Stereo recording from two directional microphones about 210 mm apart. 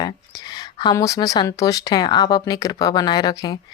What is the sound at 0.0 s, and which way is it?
Speech, 20° left (ahead or behind).